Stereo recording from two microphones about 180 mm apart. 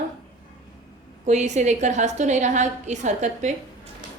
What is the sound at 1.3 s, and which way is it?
Speech, 40° right (ahead or behind).